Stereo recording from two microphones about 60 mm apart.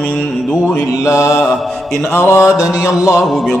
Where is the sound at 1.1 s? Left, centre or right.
Left.